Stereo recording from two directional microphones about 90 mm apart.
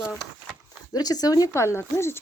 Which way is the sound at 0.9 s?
45° left (ahead or behind).